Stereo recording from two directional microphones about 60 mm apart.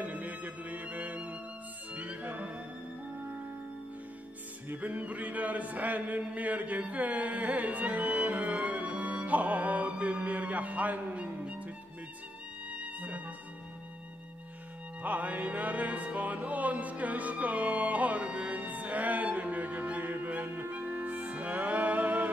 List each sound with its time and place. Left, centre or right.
0.0 s music: right
4.6 s chant: right
12.8 s music: right
15.0 s music: right